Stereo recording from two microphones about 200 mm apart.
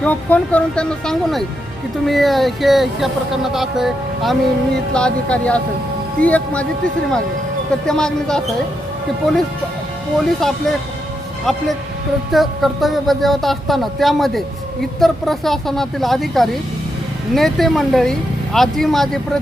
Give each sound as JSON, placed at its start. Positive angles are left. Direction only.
{"t": 0.0, "sound": "speech", "side_deg": 5}
{"t": 7.9, "sound": "speech", "side_deg": 5}
{"t": 10.2, "sound": "speech", "side_deg": 0}